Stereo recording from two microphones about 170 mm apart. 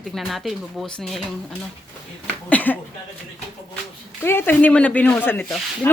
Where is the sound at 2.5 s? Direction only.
10° left (ahead or behind).